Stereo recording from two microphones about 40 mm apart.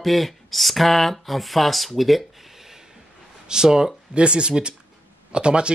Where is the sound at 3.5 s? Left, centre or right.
Centre.